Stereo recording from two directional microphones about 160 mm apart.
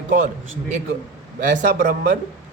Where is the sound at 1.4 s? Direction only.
50° right (ahead or behind).